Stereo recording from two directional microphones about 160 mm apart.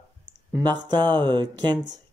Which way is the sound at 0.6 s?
25° right (ahead or behind).